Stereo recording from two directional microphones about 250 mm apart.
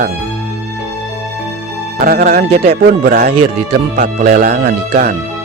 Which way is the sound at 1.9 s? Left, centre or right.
Right.